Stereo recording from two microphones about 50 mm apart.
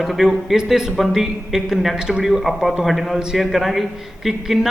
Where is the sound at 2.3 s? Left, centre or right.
Centre.